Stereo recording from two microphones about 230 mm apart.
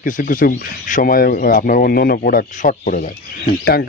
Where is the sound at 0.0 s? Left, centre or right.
Left.